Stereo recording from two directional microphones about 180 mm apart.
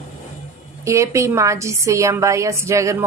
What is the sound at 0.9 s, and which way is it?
A man's voice, 15° right (ahead or behind).